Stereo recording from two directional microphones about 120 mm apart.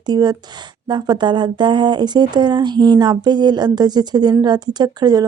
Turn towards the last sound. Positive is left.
turn(degrees=-35)  # may be behind; listen again after turning